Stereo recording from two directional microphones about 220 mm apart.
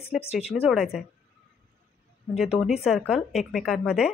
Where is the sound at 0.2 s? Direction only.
25° left (ahead or behind).